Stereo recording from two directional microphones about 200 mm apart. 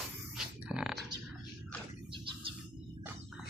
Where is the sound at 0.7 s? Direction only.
5° right (ahead or behind).